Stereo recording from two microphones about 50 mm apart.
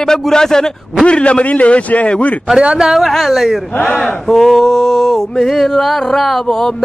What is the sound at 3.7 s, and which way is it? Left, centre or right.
Speech, left.